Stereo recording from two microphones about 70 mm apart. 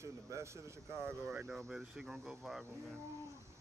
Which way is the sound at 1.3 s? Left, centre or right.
Centre.